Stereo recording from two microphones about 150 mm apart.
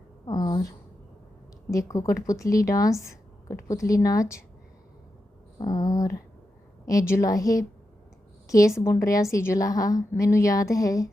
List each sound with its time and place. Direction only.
0.3 s a sound: 25° left (ahead or behind)
1.9 s a woman's voice: 20° left (ahead or behind)
5.5 s a woman's voice: 25° left (ahead or behind)